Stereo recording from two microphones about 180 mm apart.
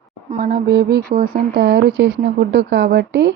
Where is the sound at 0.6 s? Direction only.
65° right (ahead or behind).